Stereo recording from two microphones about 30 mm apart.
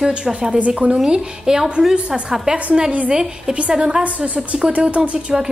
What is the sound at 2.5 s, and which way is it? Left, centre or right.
A woman's voice, right.